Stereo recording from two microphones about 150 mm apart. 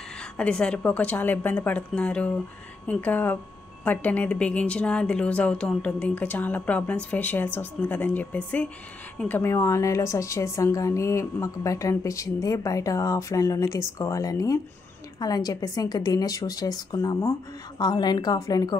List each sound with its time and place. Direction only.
0.4 s a woman's voice: 5° left (ahead or behind); by 18.8 s 25° left (ahead or behind)